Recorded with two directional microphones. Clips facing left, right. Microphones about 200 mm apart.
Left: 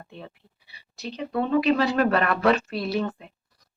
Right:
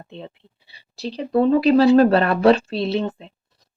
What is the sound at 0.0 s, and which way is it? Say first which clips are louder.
Speech: right 5 dB; 25° right (ahead or behind).